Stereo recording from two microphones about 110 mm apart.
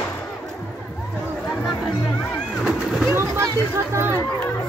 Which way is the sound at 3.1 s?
25° right (ahead or behind).